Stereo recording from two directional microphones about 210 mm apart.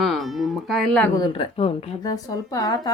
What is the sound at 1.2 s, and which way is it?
Speech, 25° left (ahead or behind).